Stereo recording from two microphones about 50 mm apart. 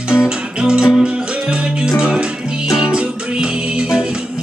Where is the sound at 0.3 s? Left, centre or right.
Centre.